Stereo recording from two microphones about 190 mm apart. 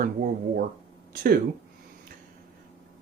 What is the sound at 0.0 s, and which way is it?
Speech, 45° right (ahead or behind).